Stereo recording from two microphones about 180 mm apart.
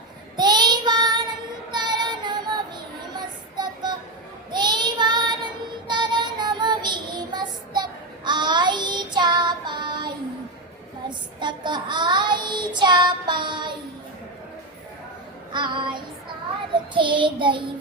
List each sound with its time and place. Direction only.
0.3 s child singing: 25° right (ahead or behind)
4.5 s child singing: 25° right (ahead or behind)
11.3 s child singing: 25° right (ahead or behind)
15.5 s child singing: 25° right (ahead or behind)